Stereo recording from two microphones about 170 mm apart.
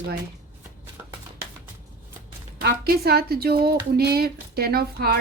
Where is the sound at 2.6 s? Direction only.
65° right (ahead or behind).